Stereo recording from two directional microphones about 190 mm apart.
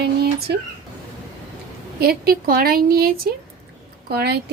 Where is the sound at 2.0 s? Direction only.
55° right (ahead or behind).